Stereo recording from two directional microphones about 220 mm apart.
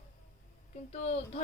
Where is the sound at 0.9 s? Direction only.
30° left (ahead or behind).